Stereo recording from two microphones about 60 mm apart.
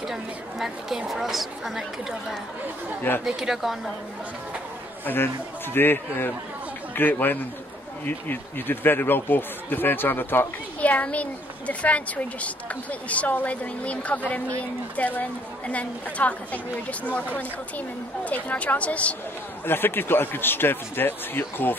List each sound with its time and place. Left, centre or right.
0.0 s a woman's voice: centre
3.3 s speech: centre
5.0 s speech: left
10.8 s a woman's voice: left
19.6 s speech: left